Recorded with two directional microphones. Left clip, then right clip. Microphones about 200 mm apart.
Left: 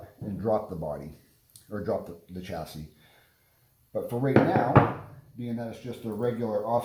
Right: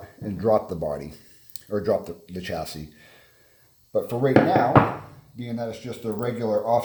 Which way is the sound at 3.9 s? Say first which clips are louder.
Right 7 dB; 40° right (ahead or behind).